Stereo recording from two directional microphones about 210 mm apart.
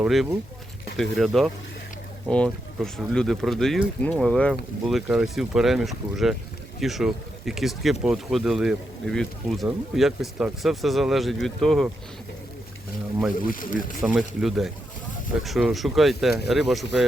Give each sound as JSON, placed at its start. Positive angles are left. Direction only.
{"t": 0.0, "sound": "speech", "side_deg": 0}
{"t": 13.5, "sound": "speech", "side_deg": 40}
{"t": 14.0, "sound": "speech", "side_deg": 0}